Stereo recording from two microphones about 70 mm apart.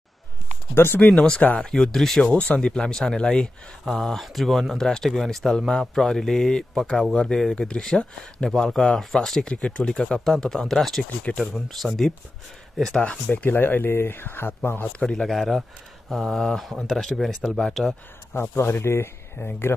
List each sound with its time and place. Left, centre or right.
0.7 s speech: left
1.7 s speech: centre
11.1 s speech: centre
11.4 s speech: centre
13.0 s speech: centre
14.9 s speech: centre
18.3 s speech: left